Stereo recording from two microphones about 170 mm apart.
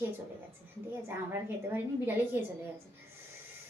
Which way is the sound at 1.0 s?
10° right (ahead or behind).